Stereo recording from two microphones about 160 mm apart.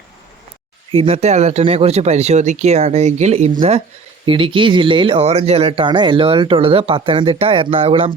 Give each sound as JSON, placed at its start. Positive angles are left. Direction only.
{"t": 0.9, "sound": "speech", "side_deg": -40}